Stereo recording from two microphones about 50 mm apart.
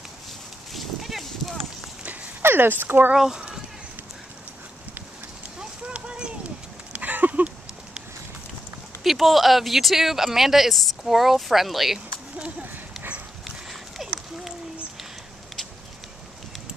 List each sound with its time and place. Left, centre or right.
0.7 s a sound: centre
2.4 s speech: right
3.2 s speech: centre
5.6 s clip-clop: right
6.9 s a sound: right
9.0 s speech: centre
12.4 s horse: right